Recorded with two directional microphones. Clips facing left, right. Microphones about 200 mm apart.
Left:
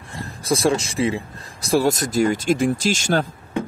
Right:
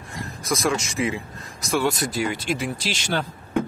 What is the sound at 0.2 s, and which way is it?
Speech, 30° left (ahead or behind).